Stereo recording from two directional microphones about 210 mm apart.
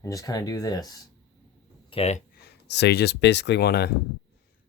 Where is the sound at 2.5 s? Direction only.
55° left (ahead or behind).